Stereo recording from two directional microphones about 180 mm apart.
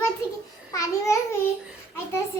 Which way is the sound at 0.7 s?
15° left (ahead or behind).